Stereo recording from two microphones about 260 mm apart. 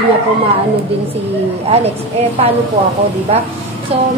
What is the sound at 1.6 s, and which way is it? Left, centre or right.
Speech, right.